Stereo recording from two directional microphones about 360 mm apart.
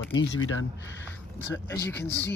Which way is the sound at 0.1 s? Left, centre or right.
Left.